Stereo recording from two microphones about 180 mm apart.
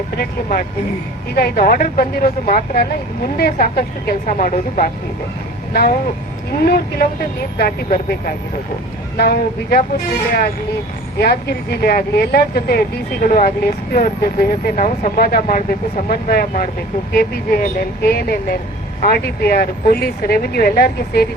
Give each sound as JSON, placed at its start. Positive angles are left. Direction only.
{"t": 1.4, "sound": "speech", "side_deg": 55}
{"t": 5.7, "sound": "speech", "side_deg": 60}
{"t": 11.2, "sound": "speech", "side_deg": 60}